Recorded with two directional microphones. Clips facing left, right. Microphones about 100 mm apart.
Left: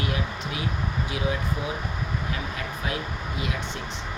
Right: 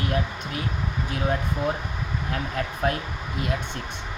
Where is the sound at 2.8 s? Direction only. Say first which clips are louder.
Right 6 dB; 50° right (ahead or behind).